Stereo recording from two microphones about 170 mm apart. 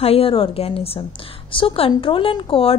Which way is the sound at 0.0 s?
35° left (ahead or behind).